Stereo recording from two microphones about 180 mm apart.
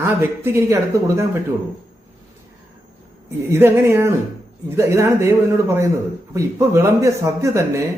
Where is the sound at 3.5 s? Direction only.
15° right (ahead or behind).